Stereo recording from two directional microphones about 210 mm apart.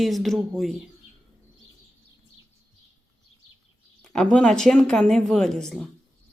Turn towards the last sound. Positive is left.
turn(degrees=0)  # may be behind; listen again after turning